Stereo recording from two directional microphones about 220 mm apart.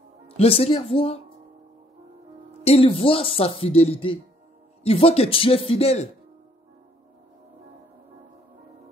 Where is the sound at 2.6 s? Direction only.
25° left (ahead or behind).